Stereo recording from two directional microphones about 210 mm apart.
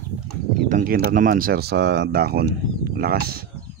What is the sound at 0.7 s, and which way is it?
Speech, 40° right (ahead or behind).